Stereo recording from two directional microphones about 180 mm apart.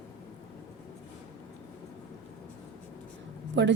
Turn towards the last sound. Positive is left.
turn(degrees=-80)